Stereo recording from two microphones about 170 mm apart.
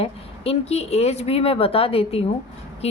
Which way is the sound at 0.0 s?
35° left (ahead or behind).